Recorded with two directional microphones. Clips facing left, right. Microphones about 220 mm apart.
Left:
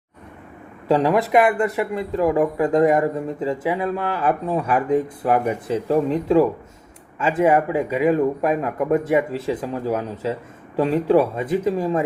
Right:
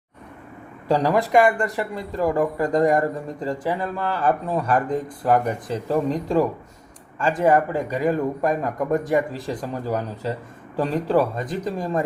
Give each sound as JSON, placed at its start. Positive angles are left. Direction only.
{"t": 0.9, "sound": "speech", "side_deg": 5}